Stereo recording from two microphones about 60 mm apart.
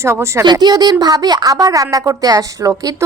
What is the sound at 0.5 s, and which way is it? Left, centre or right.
A woman's voice, right.